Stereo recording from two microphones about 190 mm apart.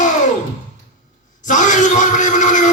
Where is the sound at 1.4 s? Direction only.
40° left (ahead or behind).